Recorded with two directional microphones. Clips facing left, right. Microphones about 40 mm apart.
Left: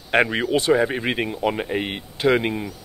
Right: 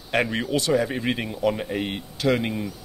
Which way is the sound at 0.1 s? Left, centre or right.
Left.